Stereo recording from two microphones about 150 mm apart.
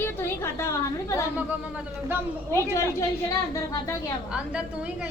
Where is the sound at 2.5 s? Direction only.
20° left (ahead or behind).